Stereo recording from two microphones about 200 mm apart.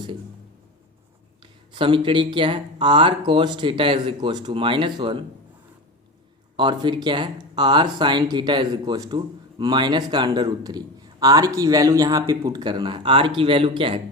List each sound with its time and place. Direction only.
1.4 s speech: 25° right (ahead or behind)
6.6 s speech: 25° right (ahead or behind)